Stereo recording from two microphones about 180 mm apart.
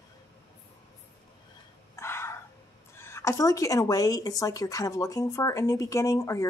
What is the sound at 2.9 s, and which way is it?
Speech, 15° left (ahead or behind).